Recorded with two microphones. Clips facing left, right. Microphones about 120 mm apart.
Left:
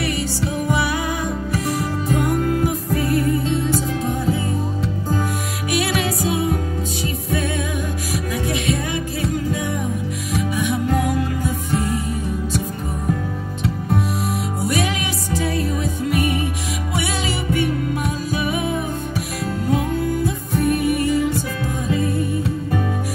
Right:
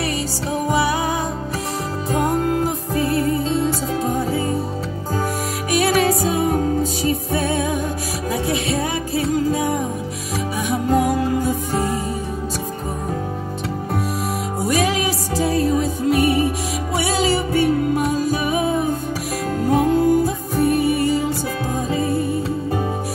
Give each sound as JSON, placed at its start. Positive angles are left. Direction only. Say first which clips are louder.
{"t": 0.6, "sound": "music", "louder": "right 4 dB", "side_deg": -35}
{"t": 5.7, "sound": "music", "louder": "right 4 dB", "side_deg": -40}
{"t": 14.6, "sound": "music", "louder": "right 4 dB", "side_deg": -40}